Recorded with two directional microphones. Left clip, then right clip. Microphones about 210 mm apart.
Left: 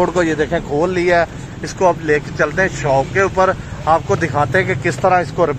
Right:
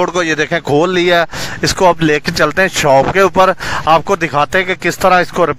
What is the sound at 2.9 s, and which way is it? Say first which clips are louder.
Speech: right 5 dB; 50° right (ahead or behind).